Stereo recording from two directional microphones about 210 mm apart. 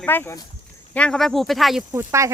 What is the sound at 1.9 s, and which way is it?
Speech, 15° right (ahead or behind).